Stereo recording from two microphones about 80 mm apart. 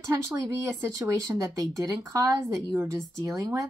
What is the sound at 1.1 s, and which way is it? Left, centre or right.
Speech, right.